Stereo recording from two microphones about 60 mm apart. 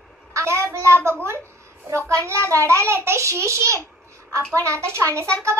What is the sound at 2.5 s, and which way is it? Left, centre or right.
A child's voice, right.